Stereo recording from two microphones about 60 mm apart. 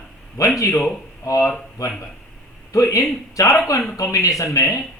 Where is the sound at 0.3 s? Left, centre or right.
Left.